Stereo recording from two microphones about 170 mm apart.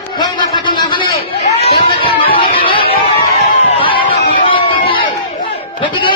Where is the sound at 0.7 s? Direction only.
30° left (ahead or behind).